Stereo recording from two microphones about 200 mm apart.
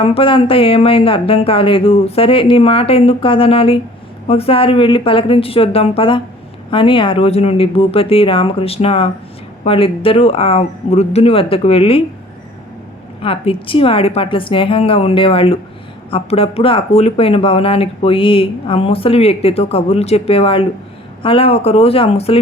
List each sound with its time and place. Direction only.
0.0 s speech: 25° left (ahead or behind)
13.2 s speech: 30° left (ahead or behind)